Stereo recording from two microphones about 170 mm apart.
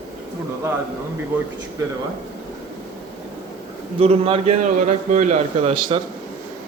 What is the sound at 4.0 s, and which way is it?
A man's voice, 35° right (ahead or behind).